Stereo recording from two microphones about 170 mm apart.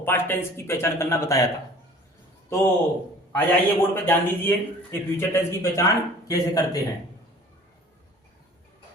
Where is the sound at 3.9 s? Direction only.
10° left (ahead or behind).